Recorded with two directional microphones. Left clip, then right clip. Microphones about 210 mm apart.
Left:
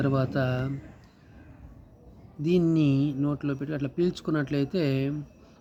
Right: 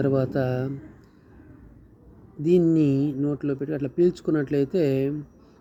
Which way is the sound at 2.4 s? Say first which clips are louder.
Right 5 dB; centre (ahead or behind).